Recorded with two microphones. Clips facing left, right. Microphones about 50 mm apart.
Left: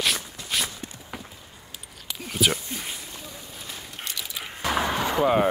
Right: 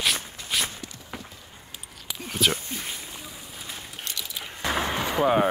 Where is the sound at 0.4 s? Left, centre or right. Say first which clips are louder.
Even; right.